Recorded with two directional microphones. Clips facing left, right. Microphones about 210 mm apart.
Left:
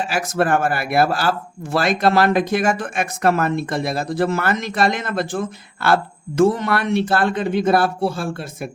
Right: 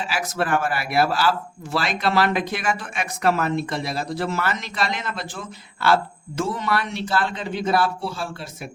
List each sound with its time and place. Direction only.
0.0 s speech: 45° left (ahead or behind)